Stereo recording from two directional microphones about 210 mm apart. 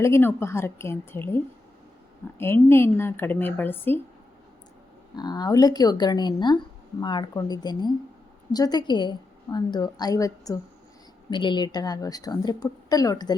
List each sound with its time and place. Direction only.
0.0 s a woman's voice: 10° left (ahead or behind)
2.4 s a woman's voice: 10° left (ahead or behind)
5.1 s a woman's voice: 20° left (ahead or behind)